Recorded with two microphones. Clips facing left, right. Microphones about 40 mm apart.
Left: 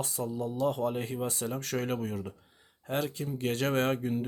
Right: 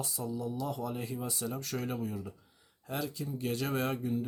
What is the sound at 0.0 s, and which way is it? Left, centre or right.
Speech, left.